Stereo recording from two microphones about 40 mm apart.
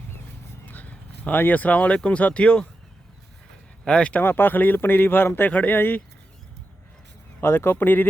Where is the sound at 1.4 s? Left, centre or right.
Left.